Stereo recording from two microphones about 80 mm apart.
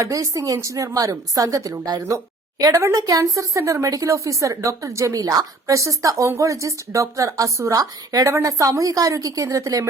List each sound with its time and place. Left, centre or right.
0.0 s a woman's voice: right